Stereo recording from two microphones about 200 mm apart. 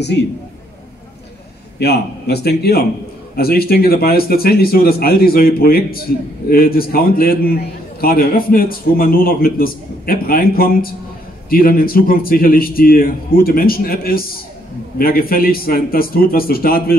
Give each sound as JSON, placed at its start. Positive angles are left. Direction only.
{"t": 1.8, "sound": "a man's voice", "side_deg": 55}